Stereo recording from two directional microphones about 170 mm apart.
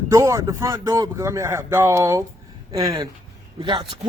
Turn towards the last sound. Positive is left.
turn(degrees=-30)  # may be behind; listen again after turning